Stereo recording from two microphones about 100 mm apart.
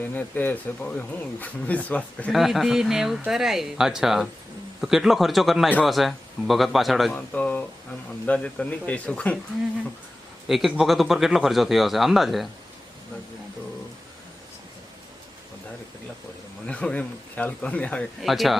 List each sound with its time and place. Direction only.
0.0 s speech: 20° left (ahead or behind)
2.3 s speech: centre (ahead or behind)
7.1 s speech: 15° left (ahead or behind)
10.5 s speech: centre (ahead or behind)
16.6 s speech: 10° left (ahead or behind)
18.2 s speech: centre (ahead or behind)